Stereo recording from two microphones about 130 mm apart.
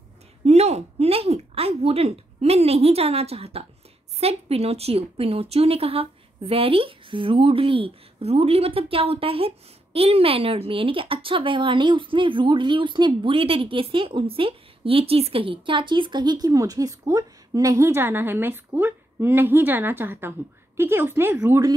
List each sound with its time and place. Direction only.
0.5 s a woman's voice: 55° right (ahead or behind); by 21.5 s 15° right (ahead or behind)